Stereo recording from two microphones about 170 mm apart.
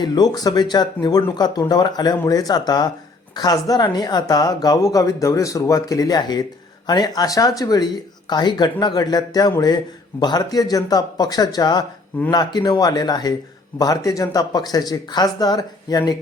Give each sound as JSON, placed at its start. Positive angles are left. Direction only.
{"t": 0.0, "sound": "speech", "side_deg": 25}